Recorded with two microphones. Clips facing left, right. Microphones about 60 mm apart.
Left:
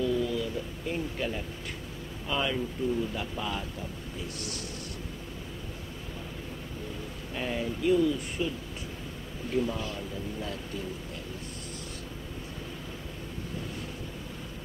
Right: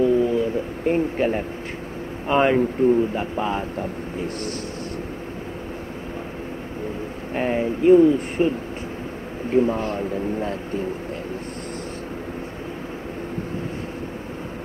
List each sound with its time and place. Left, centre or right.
0.0 s a sound: right
2.2 s speech: right
7.3 s a man's voice: right